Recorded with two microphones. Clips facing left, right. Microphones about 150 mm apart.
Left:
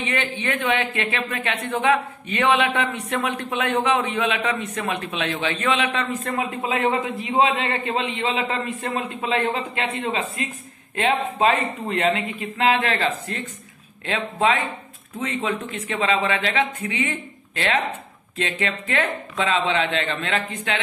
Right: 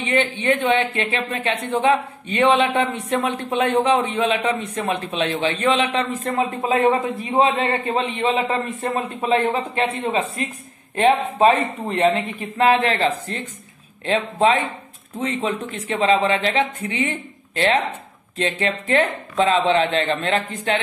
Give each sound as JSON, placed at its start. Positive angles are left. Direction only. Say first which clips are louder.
{"t": 0.0, "sound": "speech", "louder": "right 5 dB", "side_deg": -30}
{"t": 11.0, "sound": "speech", "louder": "right 5 dB", "side_deg": -35}